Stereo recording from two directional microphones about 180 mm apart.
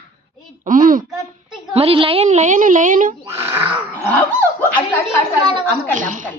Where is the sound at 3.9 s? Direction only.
10° left (ahead or behind).